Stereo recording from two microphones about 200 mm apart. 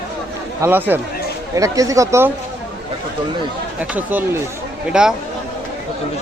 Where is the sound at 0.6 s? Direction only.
10° right (ahead or behind).